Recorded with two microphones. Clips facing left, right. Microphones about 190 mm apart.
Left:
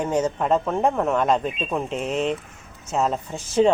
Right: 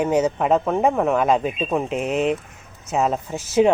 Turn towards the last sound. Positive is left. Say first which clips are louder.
# right 2 dB
turn(degrees=-5)  # may be behind; listen again after turning